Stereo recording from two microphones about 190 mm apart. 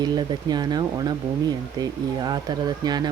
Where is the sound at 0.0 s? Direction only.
20° right (ahead or behind).